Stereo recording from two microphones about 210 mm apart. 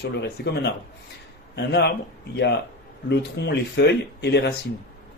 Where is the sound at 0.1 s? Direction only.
55° left (ahead or behind).